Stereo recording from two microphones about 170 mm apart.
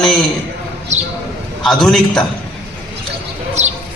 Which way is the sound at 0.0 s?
5° left (ahead or behind).